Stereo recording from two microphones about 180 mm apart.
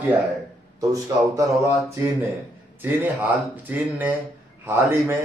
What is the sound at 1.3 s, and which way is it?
Speech, 15° right (ahead or behind).